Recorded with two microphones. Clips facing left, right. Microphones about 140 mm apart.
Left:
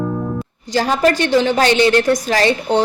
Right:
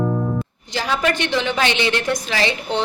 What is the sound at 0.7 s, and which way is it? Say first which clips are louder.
A woman's voice: left 6 dB; 40° left (ahead or behind).